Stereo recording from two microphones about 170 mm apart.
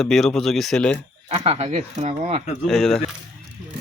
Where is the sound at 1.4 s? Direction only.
40° right (ahead or behind).